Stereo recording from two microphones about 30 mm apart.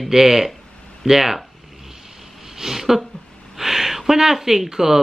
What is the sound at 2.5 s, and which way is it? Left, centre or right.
Speech, centre.